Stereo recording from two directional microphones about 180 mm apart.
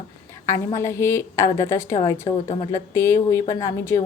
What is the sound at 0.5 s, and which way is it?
A woman's voice, 15° left (ahead or behind).